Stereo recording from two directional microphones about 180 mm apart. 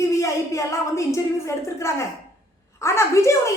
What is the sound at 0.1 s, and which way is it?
A woman's voice, 15° left (ahead or behind).